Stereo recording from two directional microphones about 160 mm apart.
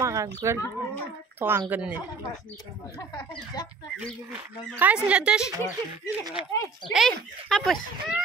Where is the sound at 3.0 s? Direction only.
25° left (ahead or behind).